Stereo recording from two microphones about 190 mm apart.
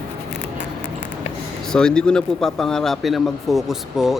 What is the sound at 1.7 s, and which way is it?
Speech, 5° left (ahead or behind).